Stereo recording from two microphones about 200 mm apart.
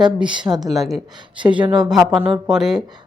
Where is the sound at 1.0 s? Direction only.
20° right (ahead or behind).